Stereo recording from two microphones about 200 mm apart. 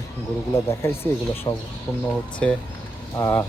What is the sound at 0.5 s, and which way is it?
Speech, 15° left (ahead or behind).